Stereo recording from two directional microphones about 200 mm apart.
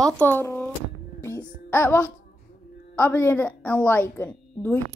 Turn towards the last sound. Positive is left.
turn(degrees=10)  # may be behind; listen again after turning